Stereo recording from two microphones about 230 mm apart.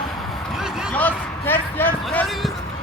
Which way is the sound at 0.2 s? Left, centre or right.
Centre.